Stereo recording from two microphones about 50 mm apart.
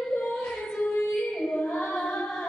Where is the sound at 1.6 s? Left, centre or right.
Left.